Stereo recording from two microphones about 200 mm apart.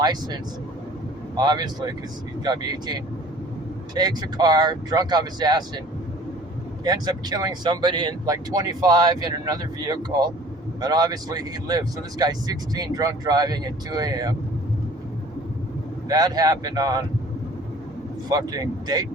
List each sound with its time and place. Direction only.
0.0 s speech: 20° right (ahead or behind)
1.4 s speech: 20° right (ahead or behind)
6.8 s speech: 20° right (ahead or behind)
16.0 s speech: 20° right (ahead or behind)
18.3 s speech: 20° right (ahead or behind)